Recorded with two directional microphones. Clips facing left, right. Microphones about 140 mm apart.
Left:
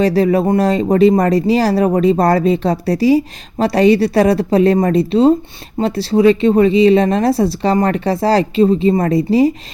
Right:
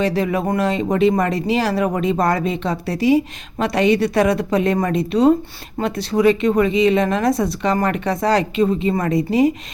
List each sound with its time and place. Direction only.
0.0 s speech: 35° left (ahead or behind)